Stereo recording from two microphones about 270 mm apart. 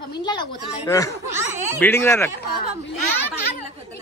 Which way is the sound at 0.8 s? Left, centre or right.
Centre.